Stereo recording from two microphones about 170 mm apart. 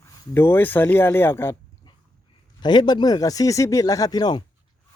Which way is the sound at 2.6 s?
25° left (ahead or behind).